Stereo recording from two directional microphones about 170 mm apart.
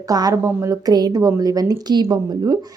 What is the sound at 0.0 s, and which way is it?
A woman's voice, 20° right (ahead or behind).